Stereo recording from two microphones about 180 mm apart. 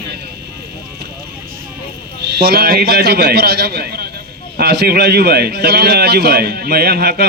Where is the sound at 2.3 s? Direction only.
60° right (ahead or behind).